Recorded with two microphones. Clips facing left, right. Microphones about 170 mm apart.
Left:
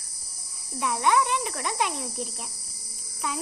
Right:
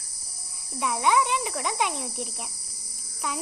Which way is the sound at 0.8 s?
5° right (ahead or behind).